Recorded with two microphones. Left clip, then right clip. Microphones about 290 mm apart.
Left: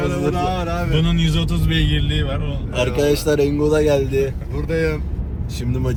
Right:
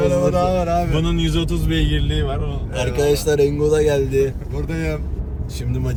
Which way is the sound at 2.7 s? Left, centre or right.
Centre.